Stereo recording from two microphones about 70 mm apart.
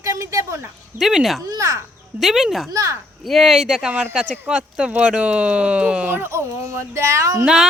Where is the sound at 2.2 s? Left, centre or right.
Centre.